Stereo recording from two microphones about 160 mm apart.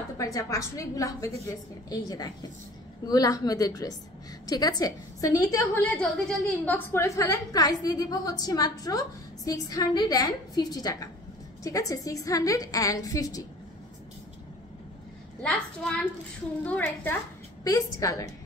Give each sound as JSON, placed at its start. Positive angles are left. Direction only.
{"t": 0.2, "sound": "a woman's voice", "side_deg": 20}
{"t": 5.9, "sound": "a woman's voice", "side_deg": 10}
{"t": 15.4, "sound": "a child's voice", "side_deg": 5}
{"t": 17.6, "sound": "a woman's voice", "side_deg": 20}